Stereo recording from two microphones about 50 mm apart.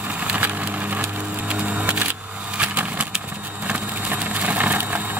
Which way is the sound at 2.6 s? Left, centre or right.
Right.